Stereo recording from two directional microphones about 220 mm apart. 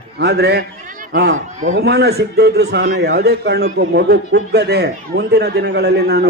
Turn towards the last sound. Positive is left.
turn(degrees=-45)  # may be behind; listen again after turning